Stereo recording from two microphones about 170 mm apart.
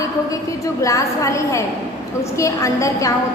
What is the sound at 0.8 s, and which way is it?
A woman's voice, 20° left (ahead or behind).